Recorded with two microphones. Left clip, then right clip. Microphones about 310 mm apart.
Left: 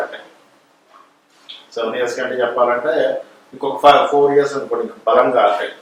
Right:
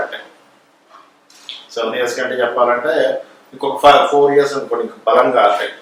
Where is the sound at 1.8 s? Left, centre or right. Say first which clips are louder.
Right 2 dB; centre.